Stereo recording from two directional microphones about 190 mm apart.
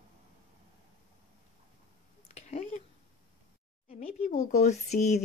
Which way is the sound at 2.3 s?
35° left (ahead or behind).